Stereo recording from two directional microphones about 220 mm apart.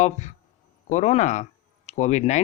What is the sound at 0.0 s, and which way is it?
Speech, 30° left (ahead or behind).